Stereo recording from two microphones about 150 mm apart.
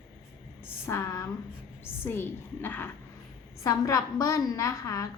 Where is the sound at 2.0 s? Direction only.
15° left (ahead or behind).